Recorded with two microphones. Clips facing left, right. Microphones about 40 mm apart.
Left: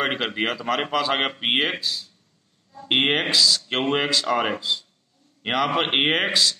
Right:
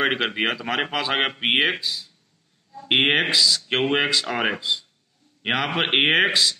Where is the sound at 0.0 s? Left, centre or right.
Centre.